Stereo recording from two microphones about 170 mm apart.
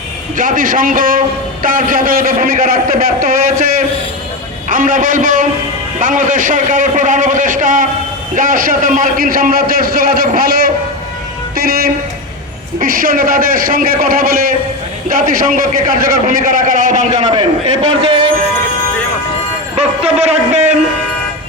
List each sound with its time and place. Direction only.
0.3 s a man's voice: 50° right (ahead or behind)
18.0 s a sound: 30° right (ahead or behind)
19.7 s a man's voice: 35° right (ahead or behind)